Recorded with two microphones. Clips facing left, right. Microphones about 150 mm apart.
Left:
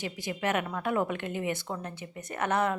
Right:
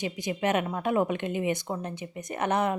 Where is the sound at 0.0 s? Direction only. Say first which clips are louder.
Right 4 dB; 20° right (ahead or behind).